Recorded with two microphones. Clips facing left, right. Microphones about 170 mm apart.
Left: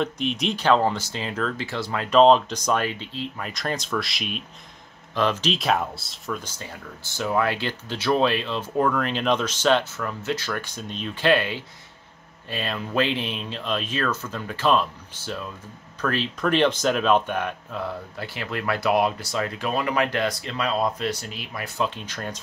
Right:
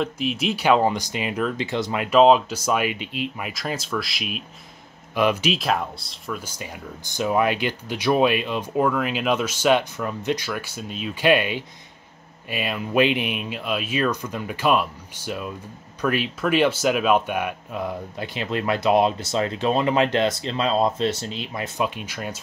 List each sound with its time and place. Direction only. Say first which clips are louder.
0.0 s speech: right 1 dB; 5° right (ahead or behind)
2.0 s speech: even; 5° right (ahead or behind)
5.6 s speech: left 1 dB; centre (ahead or behind)
6.4 s speech: right 3 dB; 15° right (ahead or behind)